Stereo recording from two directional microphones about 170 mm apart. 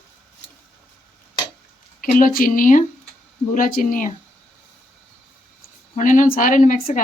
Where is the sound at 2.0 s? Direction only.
55° left (ahead or behind).